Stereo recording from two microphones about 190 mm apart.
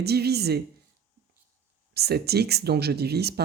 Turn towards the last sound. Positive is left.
turn(degrees=-60)  # may be behind; listen again after turning